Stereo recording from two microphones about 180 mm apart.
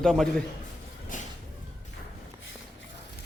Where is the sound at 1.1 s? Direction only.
45° left (ahead or behind).